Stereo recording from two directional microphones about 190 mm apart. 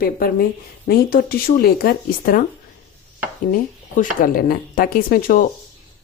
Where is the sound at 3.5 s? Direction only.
45° left (ahead or behind).